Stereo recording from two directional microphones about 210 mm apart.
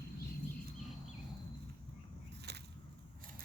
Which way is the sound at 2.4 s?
50° right (ahead or behind).